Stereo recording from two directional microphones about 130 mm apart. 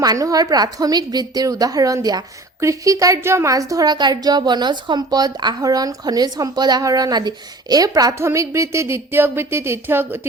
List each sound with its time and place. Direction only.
0.0 s a woman's voice: 30° right (ahead or behind)